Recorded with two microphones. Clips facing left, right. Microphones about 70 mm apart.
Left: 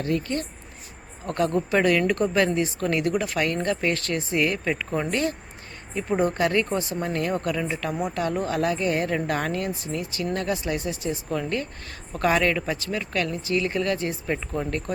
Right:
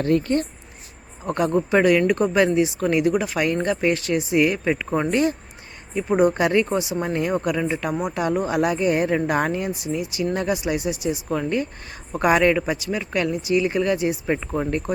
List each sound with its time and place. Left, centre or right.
0.0 s speech: right
1.4 s speech: centre